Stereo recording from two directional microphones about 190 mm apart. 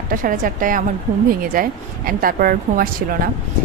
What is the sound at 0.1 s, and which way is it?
Speech, 45° right (ahead or behind).